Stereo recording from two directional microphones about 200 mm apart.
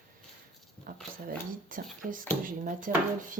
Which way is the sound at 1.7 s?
45° right (ahead or behind).